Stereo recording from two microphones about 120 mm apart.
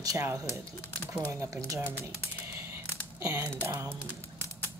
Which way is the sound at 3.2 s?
20° right (ahead or behind).